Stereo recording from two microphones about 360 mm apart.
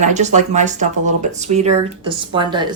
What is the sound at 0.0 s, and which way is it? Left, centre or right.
Speech, centre.